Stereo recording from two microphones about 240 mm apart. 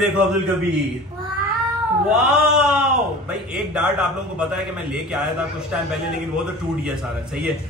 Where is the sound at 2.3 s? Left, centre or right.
Centre.